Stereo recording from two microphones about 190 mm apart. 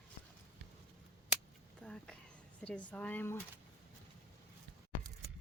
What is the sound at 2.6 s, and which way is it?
Speech, 5° left (ahead or behind).